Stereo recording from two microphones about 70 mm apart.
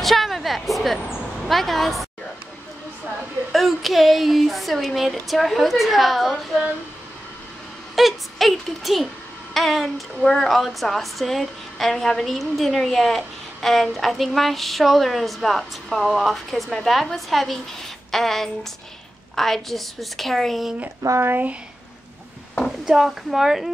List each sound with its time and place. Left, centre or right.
0.0 s a sound: centre
1.4 s a child's voice: centre
3.5 s speech: centre
7.9 s a child's voice: centre
21.2 s speech: right
22.7 s a child's voice: centre